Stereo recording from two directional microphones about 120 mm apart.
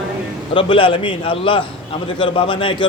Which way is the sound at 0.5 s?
45° left (ahead or behind).